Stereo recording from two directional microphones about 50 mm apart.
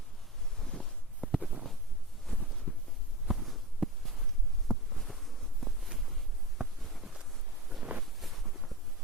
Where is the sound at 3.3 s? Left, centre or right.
Centre.